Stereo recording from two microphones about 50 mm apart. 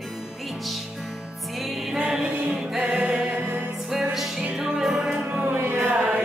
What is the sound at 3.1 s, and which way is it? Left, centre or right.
Music, centre.